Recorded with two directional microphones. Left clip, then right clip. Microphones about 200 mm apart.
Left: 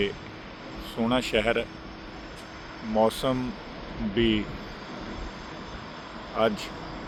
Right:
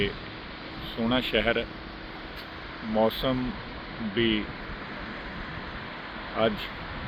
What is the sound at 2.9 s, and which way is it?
Speech, 15° left (ahead or behind).